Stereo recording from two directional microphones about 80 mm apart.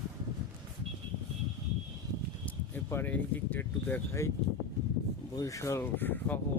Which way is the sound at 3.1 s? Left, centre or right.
Left.